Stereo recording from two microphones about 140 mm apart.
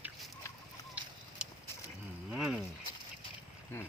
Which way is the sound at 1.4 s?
5° right (ahead or behind).